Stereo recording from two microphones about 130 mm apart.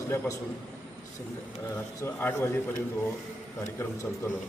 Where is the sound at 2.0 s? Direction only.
20° left (ahead or behind).